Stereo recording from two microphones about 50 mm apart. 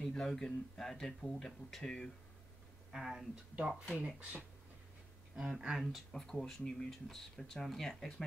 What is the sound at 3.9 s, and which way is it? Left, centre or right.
Speech, right.